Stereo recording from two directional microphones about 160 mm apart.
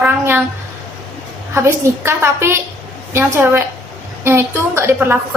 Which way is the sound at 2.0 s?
15° right (ahead or behind).